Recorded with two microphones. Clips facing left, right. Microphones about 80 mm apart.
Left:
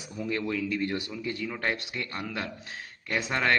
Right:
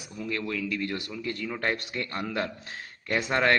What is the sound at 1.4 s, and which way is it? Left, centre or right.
Speech, centre.